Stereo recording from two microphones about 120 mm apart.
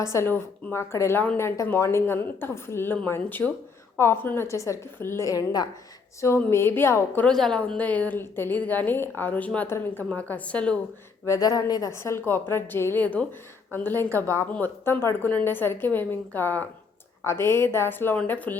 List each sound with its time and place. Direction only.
0.0 s a woman's voice: 25° left (ahead or behind)
7.3 s a woman's voice: 5° left (ahead or behind)
11.3 s a woman's voice: 30° left (ahead or behind); by 18.5 s 15° left (ahead or behind)